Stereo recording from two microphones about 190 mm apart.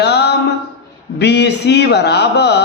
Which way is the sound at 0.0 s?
60° left (ahead or behind).